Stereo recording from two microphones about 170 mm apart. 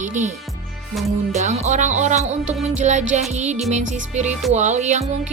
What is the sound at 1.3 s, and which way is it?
A woman's voice, 45° right (ahead or behind).